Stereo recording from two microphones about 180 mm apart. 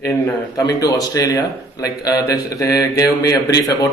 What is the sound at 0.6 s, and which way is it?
A man's voice, 20° left (ahead or behind).